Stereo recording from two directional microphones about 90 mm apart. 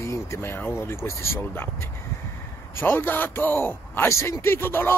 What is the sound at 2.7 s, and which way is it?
A man's voice, 25° left (ahead or behind).